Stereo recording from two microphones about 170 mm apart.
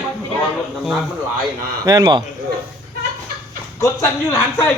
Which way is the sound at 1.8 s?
25° right (ahead or behind).